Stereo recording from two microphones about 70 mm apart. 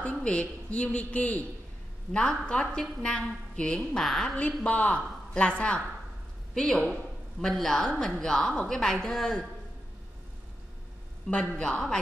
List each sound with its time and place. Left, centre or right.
0.0 s a man's voice: centre
11.2 s a woman's voice: centre